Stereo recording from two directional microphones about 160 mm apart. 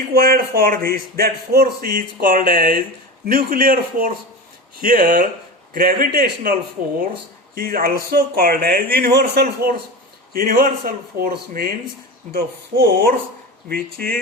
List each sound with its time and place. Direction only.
0.1 s a man's voice: 75° right (ahead or behind)
10.3 s a man's voice: 65° right (ahead or behind)